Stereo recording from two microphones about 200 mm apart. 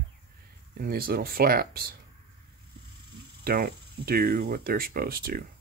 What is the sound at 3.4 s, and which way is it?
Speech, 50° right (ahead or behind).